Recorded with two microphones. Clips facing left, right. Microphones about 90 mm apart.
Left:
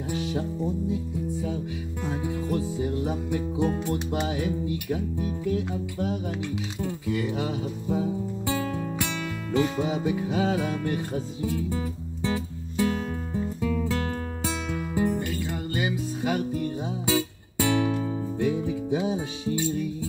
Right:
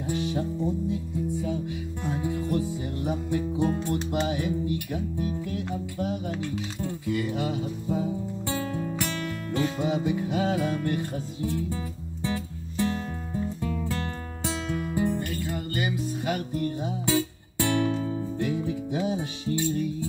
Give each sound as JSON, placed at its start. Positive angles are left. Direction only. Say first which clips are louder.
{"t": 0.1, "sound": "music", "louder": "right 1 dB", "side_deg": 15}
{"t": 2.0, "sound": "music", "louder": "right 1 dB", "side_deg": 20}
{"t": 3.5, "sound": "music", "louder": "left 1 dB", "side_deg": 5}
{"t": 4.9, "sound": "speech", "louder": "even", "side_deg": 20}
{"t": 6.5, "sound": "music", "louder": "left 1 dB", "side_deg": 10}
{"t": 8.5, "sound": "music", "louder": "left 1 dB", "side_deg": 0}
{"t": 9.6, "sound": "music", "louder": "left 2 dB", "side_deg": 15}
{"t": 12.8, "sound": "music", "louder": "left 2 dB", "side_deg": 10}
{"t": 14.8, "sound": "music", "louder": "left 2 dB", "side_deg": 15}